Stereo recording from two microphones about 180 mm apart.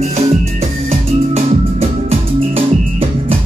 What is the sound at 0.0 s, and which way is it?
Music, 35° right (ahead or behind).